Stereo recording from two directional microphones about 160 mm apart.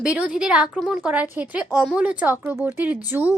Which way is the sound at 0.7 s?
5° left (ahead or behind).